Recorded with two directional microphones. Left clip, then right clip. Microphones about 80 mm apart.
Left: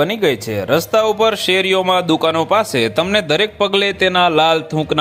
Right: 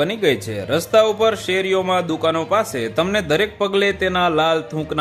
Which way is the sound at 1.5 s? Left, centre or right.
Left.